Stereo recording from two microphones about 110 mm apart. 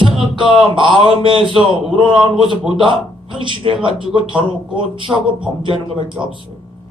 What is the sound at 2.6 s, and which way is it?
Speech, 50° right (ahead or behind).